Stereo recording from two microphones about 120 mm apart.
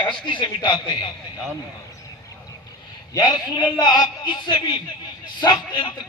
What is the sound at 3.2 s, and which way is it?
A man's voice, 35° left (ahead or behind).